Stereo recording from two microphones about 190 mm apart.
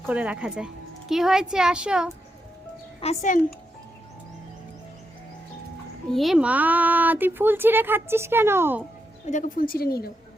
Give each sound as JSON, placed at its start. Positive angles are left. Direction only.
{"t": 0.0, "sound": "speech", "side_deg": -10}
{"t": 3.0, "sound": "speech", "side_deg": 35}
{"t": 6.1, "sound": "a child's voice", "side_deg": 0}
{"t": 9.2, "sound": "a woman's voice", "side_deg": 45}